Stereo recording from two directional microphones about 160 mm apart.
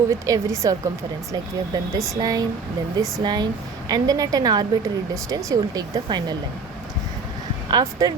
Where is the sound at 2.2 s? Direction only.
25° right (ahead or behind).